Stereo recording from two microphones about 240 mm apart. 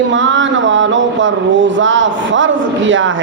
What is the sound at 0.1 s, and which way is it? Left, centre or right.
Speech, right.